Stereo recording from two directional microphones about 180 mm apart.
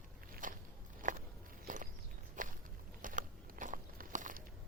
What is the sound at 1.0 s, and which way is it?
Walk, 45° right (ahead or behind).